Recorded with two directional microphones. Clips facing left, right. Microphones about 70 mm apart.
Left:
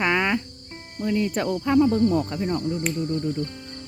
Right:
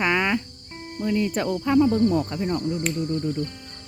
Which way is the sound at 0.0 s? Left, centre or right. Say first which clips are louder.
Even; centre.